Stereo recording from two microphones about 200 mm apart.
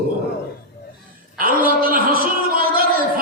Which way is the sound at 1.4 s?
45° right (ahead or behind).